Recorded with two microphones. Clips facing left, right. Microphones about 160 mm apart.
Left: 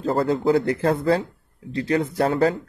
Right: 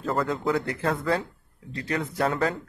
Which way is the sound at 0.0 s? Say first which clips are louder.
Left 6 dB; 30° left (ahead or behind).